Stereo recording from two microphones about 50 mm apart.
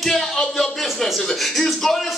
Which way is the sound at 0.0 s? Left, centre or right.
Centre.